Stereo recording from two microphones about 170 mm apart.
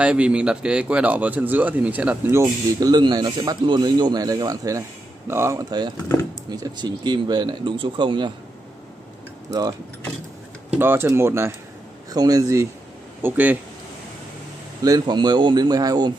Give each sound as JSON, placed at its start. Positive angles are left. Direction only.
{"t": 0.0, "sound": "speech", "side_deg": -5}
{"t": 2.4, "sound": "speech", "side_deg": -25}
{"t": 9.5, "sound": "speech", "side_deg": -20}
{"t": 10.8, "sound": "speech", "side_deg": -15}
{"t": 13.2, "sound": "speech", "side_deg": -10}
{"t": 14.8, "sound": "speech", "side_deg": -25}